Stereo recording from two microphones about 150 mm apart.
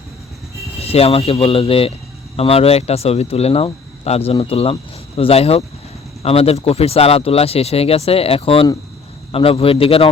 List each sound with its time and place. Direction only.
0.8 s speech: 40° left (ahead or behind)